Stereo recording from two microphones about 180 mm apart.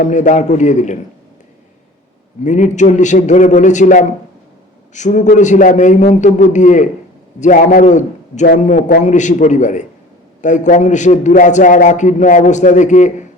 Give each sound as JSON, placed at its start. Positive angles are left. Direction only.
{"t": 0.0, "sound": "a man's voice", "side_deg": 45}
{"t": 2.4, "sound": "a man's voice", "side_deg": 40}